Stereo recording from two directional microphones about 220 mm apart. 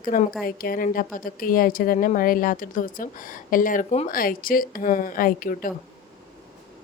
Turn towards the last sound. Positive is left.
turn(degrees=40)  # may be behind; listen again after turning